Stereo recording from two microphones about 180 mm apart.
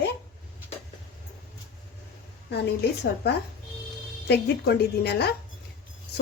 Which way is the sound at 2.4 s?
65° left (ahead or behind).